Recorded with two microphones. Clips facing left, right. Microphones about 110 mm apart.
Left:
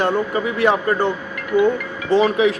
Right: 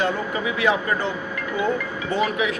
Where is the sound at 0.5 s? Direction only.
55° left (ahead or behind).